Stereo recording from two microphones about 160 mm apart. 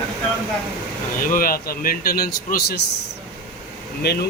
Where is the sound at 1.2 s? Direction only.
60° left (ahead or behind); by 2.8 s 80° left.